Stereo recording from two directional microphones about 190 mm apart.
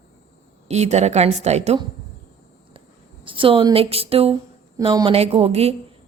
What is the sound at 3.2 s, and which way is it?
A woman's voice, 25° right (ahead or behind).